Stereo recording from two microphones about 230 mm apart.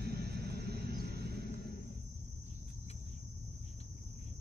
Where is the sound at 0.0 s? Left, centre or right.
Right.